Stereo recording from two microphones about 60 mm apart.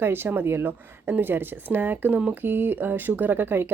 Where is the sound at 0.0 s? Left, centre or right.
Right.